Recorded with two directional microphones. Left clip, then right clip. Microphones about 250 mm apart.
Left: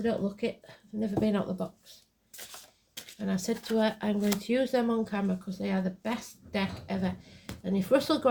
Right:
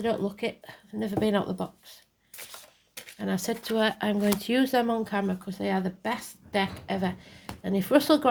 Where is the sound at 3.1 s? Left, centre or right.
Right.